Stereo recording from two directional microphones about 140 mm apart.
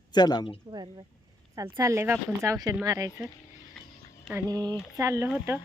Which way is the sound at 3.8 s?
5° left (ahead or behind).